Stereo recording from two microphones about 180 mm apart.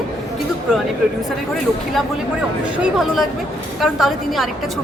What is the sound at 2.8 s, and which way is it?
A woman's voice, centre (ahead or behind).